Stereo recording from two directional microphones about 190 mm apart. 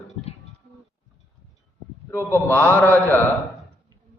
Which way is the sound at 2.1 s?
15° left (ahead or behind).